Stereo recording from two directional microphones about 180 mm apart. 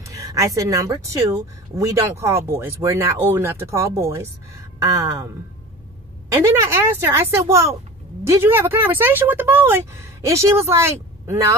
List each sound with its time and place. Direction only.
0.0 s speech: 20° right (ahead or behind)